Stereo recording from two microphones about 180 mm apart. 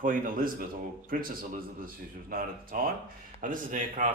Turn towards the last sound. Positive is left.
turn(degrees=-45)  # may be behind; listen again after turning